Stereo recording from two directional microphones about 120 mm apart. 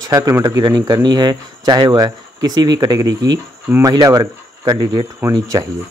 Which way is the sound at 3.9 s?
35° right (ahead or behind).